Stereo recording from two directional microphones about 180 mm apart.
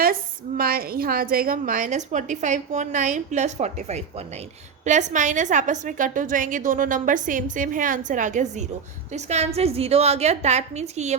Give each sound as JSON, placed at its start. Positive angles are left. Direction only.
{"t": 0.0, "sound": "a woman's voice", "side_deg": -55}